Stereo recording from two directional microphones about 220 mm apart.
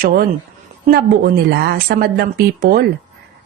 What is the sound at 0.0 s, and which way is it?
A woman's voice, 40° right (ahead or behind).